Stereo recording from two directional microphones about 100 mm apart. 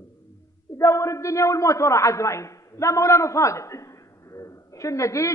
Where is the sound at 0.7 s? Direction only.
30° left (ahead or behind).